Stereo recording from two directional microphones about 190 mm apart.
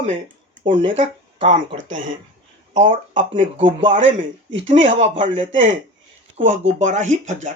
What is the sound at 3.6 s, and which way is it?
Speech, 25° right (ahead or behind).